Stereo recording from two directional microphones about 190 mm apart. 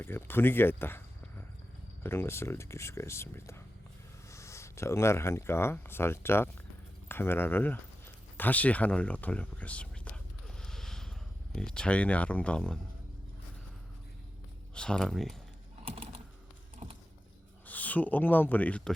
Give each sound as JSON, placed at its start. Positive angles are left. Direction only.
{"t": 0.0, "sound": "speech", "side_deg": 10}
{"t": 2.0, "sound": "speech", "side_deg": 10}
{"t": 10.6, "sound": "a sound", "side_deg": 5}
{"t": 11.5, "sound": "speech", "side_deg": 5}
{"t": 14.8, "sound": "speech", "side_deg": 5}
{"t": 15.8, "sound": "typing", "side_deg": -30}
{"t": 17.7, "sound": "speech", "side_deg": 10}